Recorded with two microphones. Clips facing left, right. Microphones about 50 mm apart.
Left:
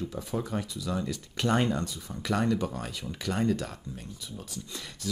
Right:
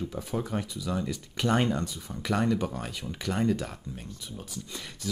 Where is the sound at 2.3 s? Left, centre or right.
Centre.